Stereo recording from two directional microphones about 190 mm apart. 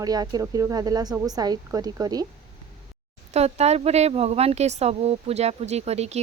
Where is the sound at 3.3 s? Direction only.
35° right (ahead or behind).